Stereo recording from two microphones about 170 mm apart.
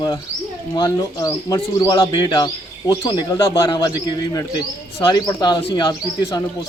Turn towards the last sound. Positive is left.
turn(degrees=25)  # may be behind; listen again after turning